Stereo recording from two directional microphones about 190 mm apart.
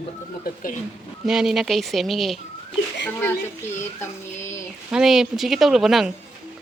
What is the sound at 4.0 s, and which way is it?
Child singing, 15° left (ahead or behind).